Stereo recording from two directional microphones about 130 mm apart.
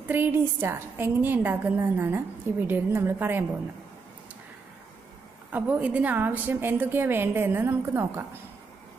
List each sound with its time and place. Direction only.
0.1 s a woman's voice: 15° right (ahead or behind)
5.5 s a woman's voice: 10° right (ahead or behind)